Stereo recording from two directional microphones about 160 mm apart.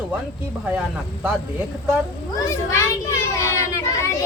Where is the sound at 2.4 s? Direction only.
15° left (ahead or behind).